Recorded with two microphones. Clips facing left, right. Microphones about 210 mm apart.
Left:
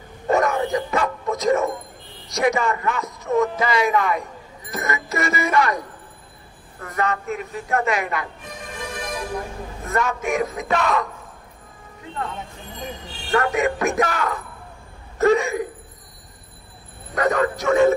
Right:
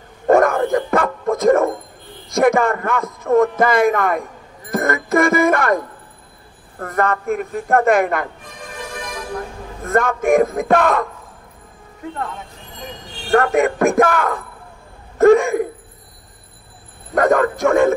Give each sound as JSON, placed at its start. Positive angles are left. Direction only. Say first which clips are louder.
{"t": 0.3, "sound": "bow-wow", "louder": "right 6 dB", "side_deg": -50}
{"t": 2.2, "sound": "a man's voice", "louder": "right 6 dB", "side_deg": -50}
{"t": 9.8, "sound": "a man's voice", "louder": "right 7 dB", "side_deg": -50}
{"t": 13.3, "sound": "a man's voice", "louder": "right 5 dB", "side_deg": -50}
{"t": 15.1, "sound": "a sound", "louder": "right 7 dB", "side_deg": -50}
{"t": 17.1, "sound": "a man's voice", "louder": "right 5 dB", "side_deg": -50}